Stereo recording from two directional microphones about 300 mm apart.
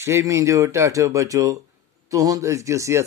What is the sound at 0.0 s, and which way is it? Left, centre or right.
Speech, centre.